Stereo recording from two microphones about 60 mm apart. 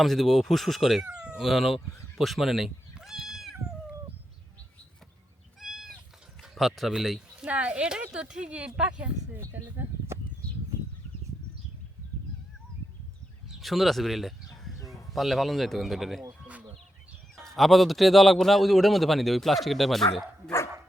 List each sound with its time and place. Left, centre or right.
0.0 s a man's voice: centre
2.1 s cat: centre
5.5 s cat: centre
6.4 s speech: centre
7.4 s speech: right
9.4 s speech: right
13.5 s fowl: centre
15.1 s a man's voice: centre
17.3 s a man's voice: centre